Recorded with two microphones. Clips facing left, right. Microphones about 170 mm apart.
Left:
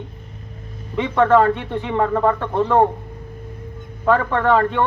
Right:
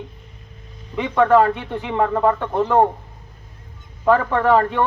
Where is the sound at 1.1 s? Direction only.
10° right (ahead or behind).